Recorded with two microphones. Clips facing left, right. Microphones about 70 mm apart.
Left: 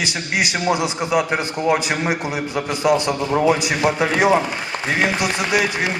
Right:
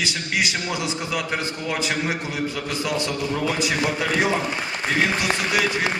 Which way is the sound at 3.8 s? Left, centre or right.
Left.